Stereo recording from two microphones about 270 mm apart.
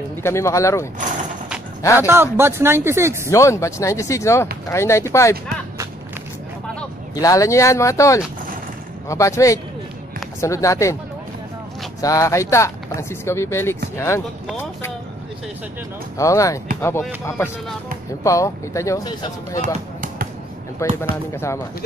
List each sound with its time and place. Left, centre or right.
0.2 s speech: centre
2.0 s speech: centre
3.3 s speech: centre
6.7 s speech: centre
12.0 s speech: centre
16.2 s speech: centre
19.6 s basketball bounce: right
20.9 s speech: centre